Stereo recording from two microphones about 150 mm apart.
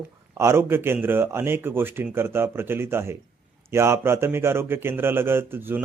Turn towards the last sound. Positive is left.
turn(degrees=-15)  # may be behind; listen again after turning